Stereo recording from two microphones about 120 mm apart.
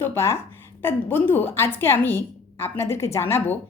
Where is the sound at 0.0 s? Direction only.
20° left (ahead or behind).